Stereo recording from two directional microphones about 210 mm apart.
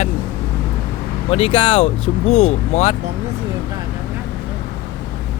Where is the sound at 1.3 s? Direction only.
25° left (ahead or behind).